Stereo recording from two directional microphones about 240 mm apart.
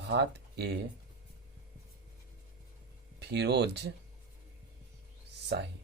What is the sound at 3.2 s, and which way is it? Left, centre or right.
Speech, right.